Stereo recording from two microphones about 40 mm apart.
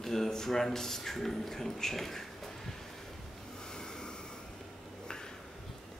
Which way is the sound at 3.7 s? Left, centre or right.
Centre.